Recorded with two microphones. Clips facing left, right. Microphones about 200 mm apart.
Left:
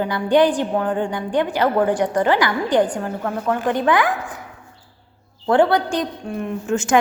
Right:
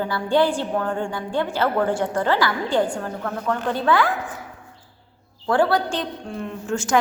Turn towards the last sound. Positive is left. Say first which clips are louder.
# left 4 dB
turn(degrees=20)  # may be behind; listen again after turning